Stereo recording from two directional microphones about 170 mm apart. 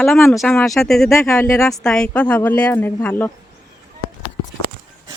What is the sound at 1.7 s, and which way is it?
A woman's voice, 5° left (ahead or behind).